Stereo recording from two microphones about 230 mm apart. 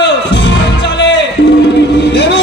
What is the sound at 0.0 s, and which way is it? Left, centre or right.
Music, left.